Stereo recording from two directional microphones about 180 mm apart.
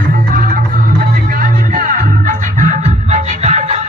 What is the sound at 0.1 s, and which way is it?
Music, 50° right (ahead or behind).